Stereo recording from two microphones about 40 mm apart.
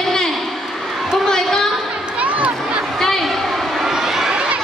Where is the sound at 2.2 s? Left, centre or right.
Right.